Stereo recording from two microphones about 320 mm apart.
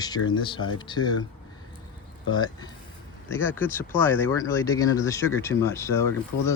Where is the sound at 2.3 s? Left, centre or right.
Centre.